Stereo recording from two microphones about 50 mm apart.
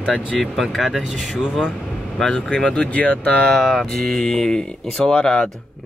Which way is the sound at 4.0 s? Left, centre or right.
Centre.